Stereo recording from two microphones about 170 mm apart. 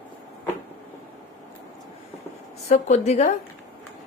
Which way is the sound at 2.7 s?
45° left (ahead or behind).